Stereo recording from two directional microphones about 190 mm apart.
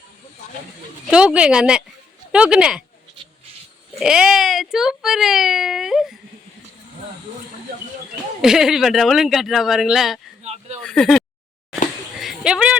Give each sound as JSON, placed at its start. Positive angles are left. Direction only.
{"t": 1.1, "sound": "speech", "side_deg": -5}
{"t": 3.9, "sound": "speech", "side_deg": -5}
{"t": 8.4, "sound": "speech", "side_deg": 0}
{"t": 10.4, "sound": "a sound", "side_deg": -35}
{"t": 10.8, "sound": "speech", "side_deg": 5}
{"t": 12.2, "sound": "a sound", "side_deg": 0}